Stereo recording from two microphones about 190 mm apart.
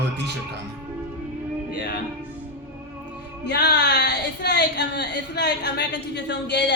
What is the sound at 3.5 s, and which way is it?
A woman's voice, 60° left (ahead or behind).